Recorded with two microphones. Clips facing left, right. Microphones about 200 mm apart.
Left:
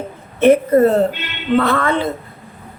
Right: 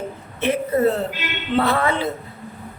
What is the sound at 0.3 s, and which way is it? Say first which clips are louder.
Speech: left 9 dB; 50° left (ahead or behind).